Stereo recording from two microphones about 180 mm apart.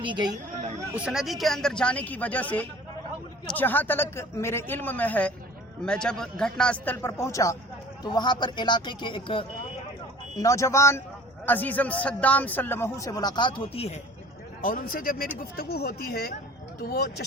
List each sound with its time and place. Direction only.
0.0 s speech: 25° right (ahead or behind)
0.9 s a man's voice: 5° right (ahead or behind); by 9.5 s 30° left (ahead or behind)
10.3 s a man's voice: 15° left (ahead or behind); by 14.0 s 35° left (ahead or behind)
14.6 s a man's voice: 50° left (ahead or behind)